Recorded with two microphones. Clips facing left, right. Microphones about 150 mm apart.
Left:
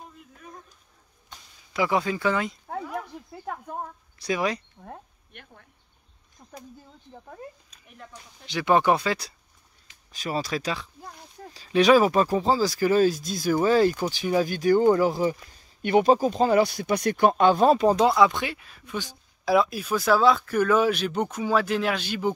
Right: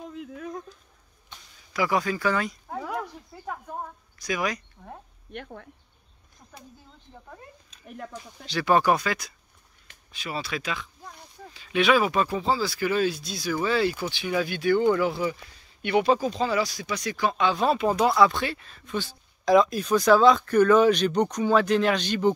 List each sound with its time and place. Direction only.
0.1 s a sound: 70° right (ahead or behind)
1.7 s speech: 25° left (ahead or behind)
4.2 s speech: 30° left (ahead or behind)
5.3 s speech: 60° right (ahead or behind)
8.5 s speech: 20° left (ahead or behind)
10.1 s speech: 40° left (ahead or behind)
18.1 s speech: 15° left (ahead or behind)